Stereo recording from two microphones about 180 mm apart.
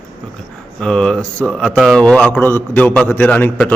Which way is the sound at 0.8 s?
5° left (ahead or behind).